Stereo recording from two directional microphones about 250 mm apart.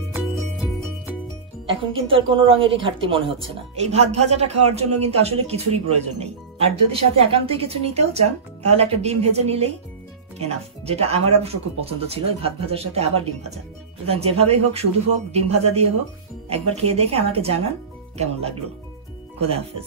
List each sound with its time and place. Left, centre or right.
0.1 s music: centre
1.7 s speech: right